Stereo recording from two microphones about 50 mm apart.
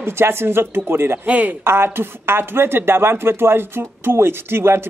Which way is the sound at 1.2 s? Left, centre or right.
Right.